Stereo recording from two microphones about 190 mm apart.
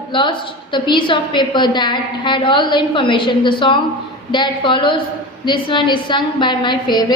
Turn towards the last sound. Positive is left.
turn(degrees=25)  # may be behind; listen again after turning